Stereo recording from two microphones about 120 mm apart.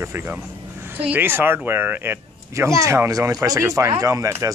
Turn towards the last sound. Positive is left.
turn(degrees=-25)  # may be behind; listen again after turning